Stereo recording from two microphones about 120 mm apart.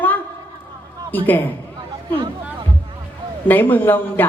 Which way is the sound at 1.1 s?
15° left (ahead or behind).